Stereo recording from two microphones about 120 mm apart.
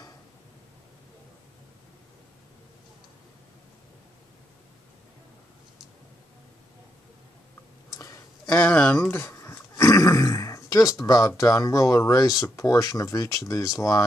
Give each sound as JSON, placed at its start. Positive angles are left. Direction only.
{"t": 7.9, "sound": "a sound", "side_deg": 25}
{"t": 8.5, "sound": "grunt", "side_deg": 10}
{"t": 12.5, "sound": "speech", "side_deg": 30}